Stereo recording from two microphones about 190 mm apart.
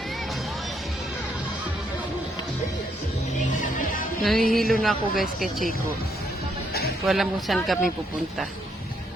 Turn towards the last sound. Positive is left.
turn(degrees=0)  # may be behind; listen again after turning